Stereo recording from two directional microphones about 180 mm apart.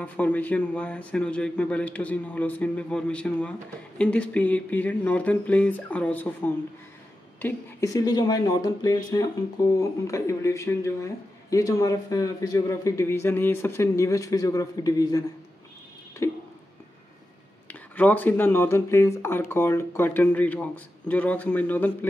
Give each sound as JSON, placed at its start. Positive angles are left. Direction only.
{"t": 0.0, "sound": "a man's voice", "side_deg": 10}
{"t": 17.6, "sound": "speech", "side_deg": 10}